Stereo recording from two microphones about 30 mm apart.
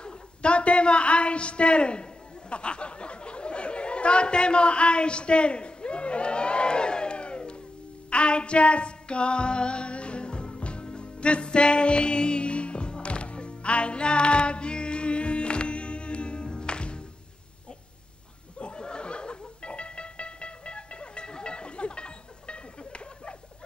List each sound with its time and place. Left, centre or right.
0.0 s a woman's voice: left
2.5 s chatter: left
8.1 s female singing: left
10.9 s music: left
18.6 s music: left